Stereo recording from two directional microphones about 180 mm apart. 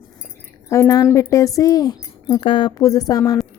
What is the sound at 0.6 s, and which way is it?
A woman's voice, 15° left (ahead or behind).